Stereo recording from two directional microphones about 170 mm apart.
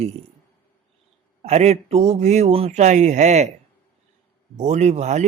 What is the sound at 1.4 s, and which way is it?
Speech, 40° right (ahead or behind).